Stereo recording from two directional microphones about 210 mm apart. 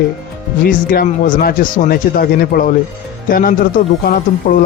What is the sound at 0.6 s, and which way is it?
Speech, 40° left (ahead or behind).